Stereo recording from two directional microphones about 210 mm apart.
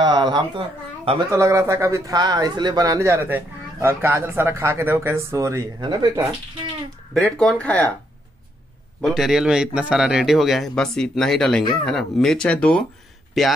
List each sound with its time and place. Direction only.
0.0 s a sound: 20° right (ahead or behind)
1.3 s speech: 15° right (ahead or behind)
7.3 s speech: 5° left (ahead or behind)
9.0 s speech: centre (ahead or behind)